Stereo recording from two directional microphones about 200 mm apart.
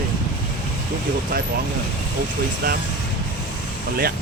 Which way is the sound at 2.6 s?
50° right (ahead or behind).